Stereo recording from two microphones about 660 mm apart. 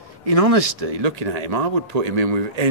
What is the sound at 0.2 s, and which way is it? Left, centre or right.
Speech, right.